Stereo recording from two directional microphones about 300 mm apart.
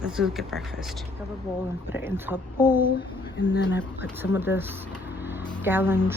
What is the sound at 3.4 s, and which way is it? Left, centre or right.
Speech, left.